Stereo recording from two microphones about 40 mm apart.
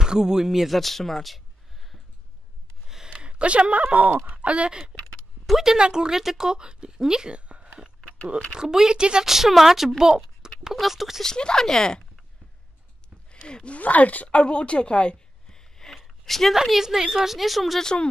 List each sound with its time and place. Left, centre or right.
0.0 s speech: centre
0.5 s speech: centre
2.9 s a sound: centre
3.2 s speech: right
5.5 s a woman's voice: centre
7.3 s a sound: right
8.5 s a woman's voice: centre
9.2 s a woman's voice: centre
11.2 s speech: centre
13.3 s speech: left
13.7 s a woman's voice: left
15.4 s a sound: centre
16.6 s a woman's voice: centre